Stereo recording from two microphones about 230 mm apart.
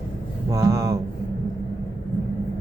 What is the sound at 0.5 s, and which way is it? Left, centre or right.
Speech, centre.